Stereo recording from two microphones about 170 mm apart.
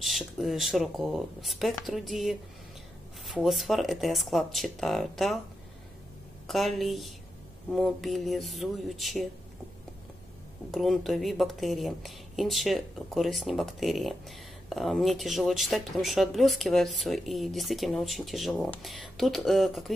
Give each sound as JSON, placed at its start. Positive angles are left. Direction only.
{"t": 0.0, "sound": "speech", "side_deg": 0}
{"t": 6.4, "sound": "speech", "side_deg": 0}
{"t": 10.7, "sound": "speech", "side_deg": 0}